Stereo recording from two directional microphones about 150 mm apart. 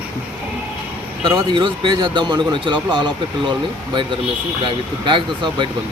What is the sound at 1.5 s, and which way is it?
Speech, 30° right (ahead or behind).